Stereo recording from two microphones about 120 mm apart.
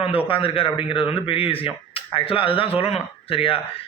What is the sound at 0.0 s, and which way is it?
Speech, 50° left (ahead or behind).